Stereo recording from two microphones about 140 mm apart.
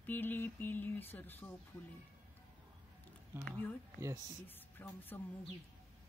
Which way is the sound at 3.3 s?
15° right (ahead or behind).